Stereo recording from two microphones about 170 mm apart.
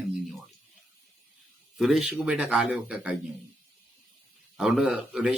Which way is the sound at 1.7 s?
Centre (ahead or behind).